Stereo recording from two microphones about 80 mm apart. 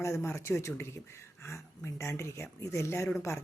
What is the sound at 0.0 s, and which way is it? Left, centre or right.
Speech, left.